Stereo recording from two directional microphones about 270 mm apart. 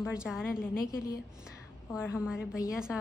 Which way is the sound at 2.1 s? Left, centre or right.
Centre.